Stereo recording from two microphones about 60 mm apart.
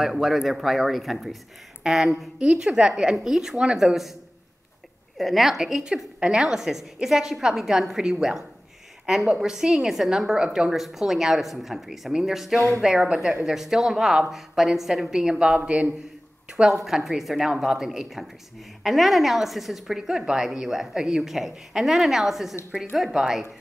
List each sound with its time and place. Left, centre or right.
0.0 s a woman's voice: centre
2.4 s a woman's voice: centre
5.1 s a woman's voice: centre
16.7 s a woman's voice: centre